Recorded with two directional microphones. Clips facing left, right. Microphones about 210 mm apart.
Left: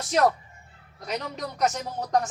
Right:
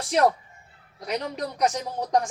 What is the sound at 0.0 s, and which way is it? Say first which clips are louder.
Speech: right 1 dB; 15° right (ahead or behind).